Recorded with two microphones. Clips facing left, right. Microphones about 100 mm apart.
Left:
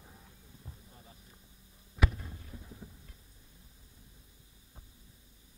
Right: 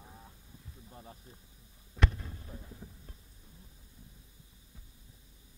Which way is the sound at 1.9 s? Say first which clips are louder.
Even; 5° left (ahead or behind).